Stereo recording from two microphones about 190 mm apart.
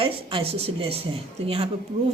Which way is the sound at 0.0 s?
30° right (ahead or behind).